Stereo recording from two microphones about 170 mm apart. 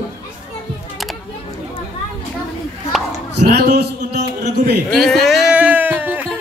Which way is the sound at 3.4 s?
80° right.